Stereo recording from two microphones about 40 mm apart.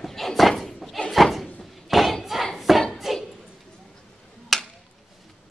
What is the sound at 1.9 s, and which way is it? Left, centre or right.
Thump, centre.